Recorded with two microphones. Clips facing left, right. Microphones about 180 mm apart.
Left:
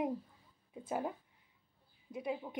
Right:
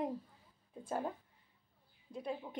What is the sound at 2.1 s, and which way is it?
Speech, 10° left (ahead or behind).